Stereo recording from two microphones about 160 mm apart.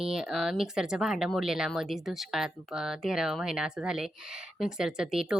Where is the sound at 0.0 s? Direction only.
5° right (ahead or behind).